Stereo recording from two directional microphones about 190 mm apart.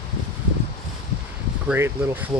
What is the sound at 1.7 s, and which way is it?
Speech, 10° right (ahead or behind).